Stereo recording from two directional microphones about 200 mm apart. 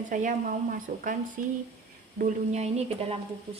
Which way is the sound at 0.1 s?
40° right (ahead or behind).